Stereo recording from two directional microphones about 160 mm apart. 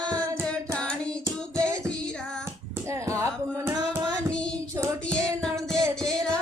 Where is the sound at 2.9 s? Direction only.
20° right (ahead or behind).